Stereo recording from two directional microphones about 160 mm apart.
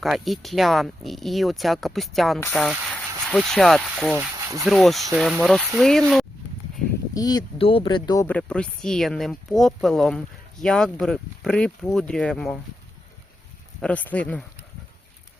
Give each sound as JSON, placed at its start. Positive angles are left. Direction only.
{"t": 0.0, "sound": "speech", "side_deg": 0}
{"t": 4.4, "sound": "a sound", "side_deg": -20}
{"t": 4.6, "sound": "speech", "side_deg": 0}
{"t": 7.1, "sound": "speech", "side_deg": 25}
{"t": 7.6, "sound": "speech", "side_deg": 35}
{"t": 8.3, "sound": "speech", "side_deg": 5}
{"t": 13.8, "sound": "speech", "side_deg": 10}